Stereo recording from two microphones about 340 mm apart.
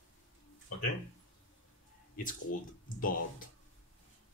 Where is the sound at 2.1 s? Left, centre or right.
Left.